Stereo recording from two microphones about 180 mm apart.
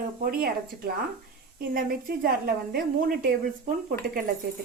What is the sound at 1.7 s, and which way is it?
A woman's voice, 55° right (ahead or behind).